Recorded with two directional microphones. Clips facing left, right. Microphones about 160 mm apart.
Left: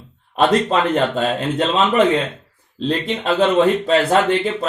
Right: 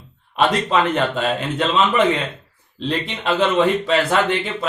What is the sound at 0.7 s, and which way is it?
A man's voice, 40° left (ahead or behind).